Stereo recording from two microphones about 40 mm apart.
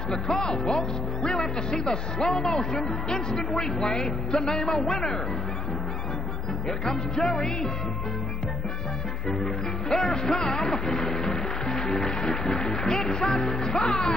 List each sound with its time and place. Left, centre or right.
0.1 s speech: centre
7.2 s music: centre
9.4 s speech: centre
11.2 s music: centre
12.0 s speech: centre